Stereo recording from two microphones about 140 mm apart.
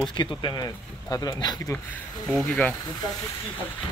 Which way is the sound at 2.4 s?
10° left (ahead or behind).